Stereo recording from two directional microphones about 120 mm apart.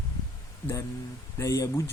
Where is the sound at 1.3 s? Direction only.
25° left (ahead or behind).